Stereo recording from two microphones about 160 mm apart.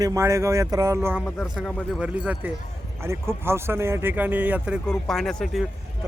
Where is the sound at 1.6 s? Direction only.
5° right (ahead or behind).